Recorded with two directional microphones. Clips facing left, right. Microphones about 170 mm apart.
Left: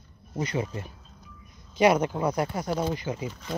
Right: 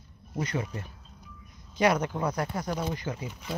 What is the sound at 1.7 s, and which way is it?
Speech, 20° left (ahead or behind).